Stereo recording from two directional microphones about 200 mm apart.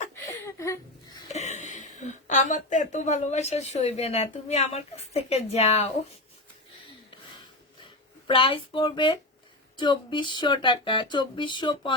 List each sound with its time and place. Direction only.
0.4 s a sound: 15° left (ahead or behind)
1.3 s a woman's voice: 35° left (ahead or behind)
8.3 s speech: 25° left (ahead or behind)